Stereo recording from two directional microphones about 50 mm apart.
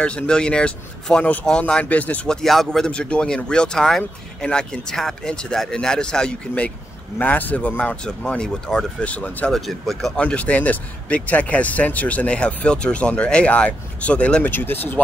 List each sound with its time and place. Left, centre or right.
0.0 s speech: left
2.2 s speech: centre
2.8 s speech: centre
7.2 s speech: left; by 8.5 s centre
8.7 s speech: centre
9.0 s speech: left
9.5 s speech: centre
10.1 s speech: left
14.4 s speech: left